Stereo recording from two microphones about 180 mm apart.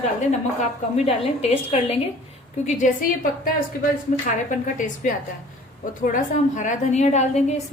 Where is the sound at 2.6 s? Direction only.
45° left (ahead or behind).